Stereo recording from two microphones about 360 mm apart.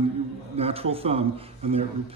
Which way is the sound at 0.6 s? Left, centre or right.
Centre.